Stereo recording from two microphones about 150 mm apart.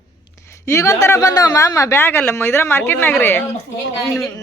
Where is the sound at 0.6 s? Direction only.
20° left (ahead or behind).